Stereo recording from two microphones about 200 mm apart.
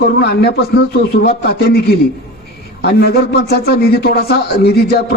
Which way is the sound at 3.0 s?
50° left (ahead or behind).